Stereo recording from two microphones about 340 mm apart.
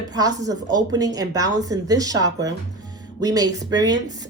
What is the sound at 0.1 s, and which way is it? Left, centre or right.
A woman's voice, centre.